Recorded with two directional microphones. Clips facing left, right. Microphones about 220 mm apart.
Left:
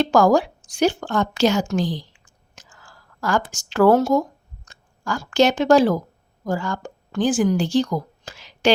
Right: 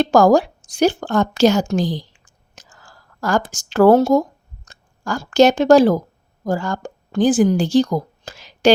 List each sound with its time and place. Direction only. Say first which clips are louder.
0.0 s a woman's voice: right 3 dB; 40° right (ahead or behind)
2.6 s a sound: right 2 dB; 40° right (ahead or behind)
5.2 s a woman's voice: right 5 dB; 40° right (ahead or behind)